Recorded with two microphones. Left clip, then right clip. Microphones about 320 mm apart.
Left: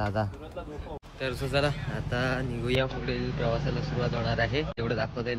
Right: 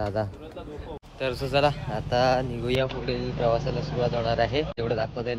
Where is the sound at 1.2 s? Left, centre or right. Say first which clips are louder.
Right 5 dB; centre.